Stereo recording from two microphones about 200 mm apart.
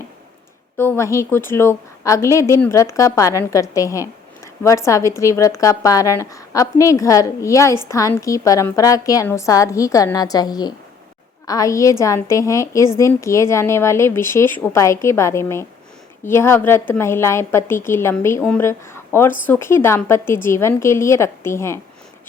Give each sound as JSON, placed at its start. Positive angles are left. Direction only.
{"t": 0.8, "sound": "a woman's voice", "side_deg": 15}